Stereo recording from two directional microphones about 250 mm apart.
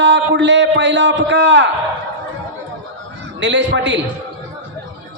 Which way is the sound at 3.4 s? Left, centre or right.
Right.